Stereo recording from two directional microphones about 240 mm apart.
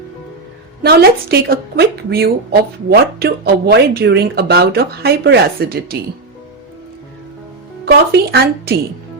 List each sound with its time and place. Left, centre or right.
0.8 s speech: right
7.9 s speech: right